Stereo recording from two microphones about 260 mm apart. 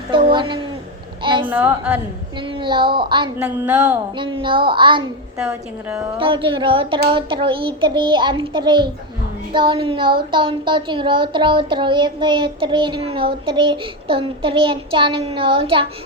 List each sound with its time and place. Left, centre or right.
0.1 s a child's voice: centre
1.5 s a woman's voice: centre
2.5 s a woman's voice: centre
3.4 s a woman's voice: centre
4.2 s a child's voice: centre
5.4 s a woman's voice: centre
6.1 s a child's voice: centre